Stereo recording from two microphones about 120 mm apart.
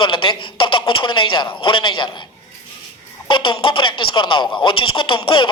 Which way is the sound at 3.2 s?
45° left (ahead or behind).